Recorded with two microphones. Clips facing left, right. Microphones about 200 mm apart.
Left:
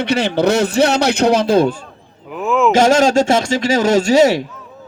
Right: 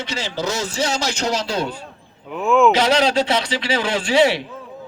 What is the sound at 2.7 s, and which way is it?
Speech, 45° left (ahead or behind).